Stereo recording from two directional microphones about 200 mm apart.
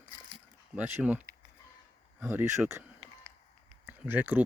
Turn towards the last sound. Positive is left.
turn(degrees=-10)  # may be behind; listen again after turning